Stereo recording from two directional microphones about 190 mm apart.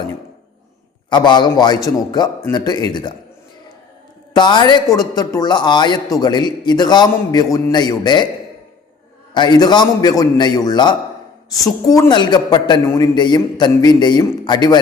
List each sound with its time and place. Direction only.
1.1 s a man's voice: 25° left (ahead or behind)
4.4 s a man's voice: 25° left (ahead or behind)
9.3 s a man's voice: 20° left (ahead or behind)